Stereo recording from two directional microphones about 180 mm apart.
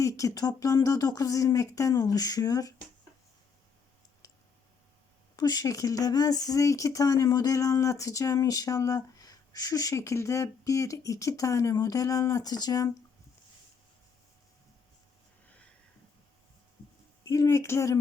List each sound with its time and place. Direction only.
0.0 s speech: 20° left (ahead or behind)
4.2 s clicking: 20° left (ahead or behind)
5.4 s speech: 20° left (ahead or behind)
17.2 s speech: 20° left (ahead or behind)